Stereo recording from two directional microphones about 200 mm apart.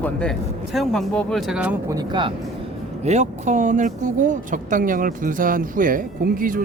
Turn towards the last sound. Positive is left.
turn(degrees=-45)  # may be behind; listen again after turning